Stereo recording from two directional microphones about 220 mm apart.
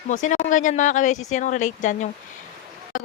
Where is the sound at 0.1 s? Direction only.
35° left (ahead or behind).